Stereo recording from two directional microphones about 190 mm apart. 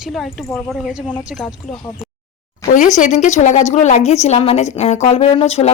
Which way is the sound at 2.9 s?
40° left (ahead or behind).